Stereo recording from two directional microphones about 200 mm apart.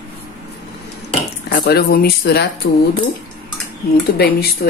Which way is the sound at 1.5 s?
50° left (ahead or behind).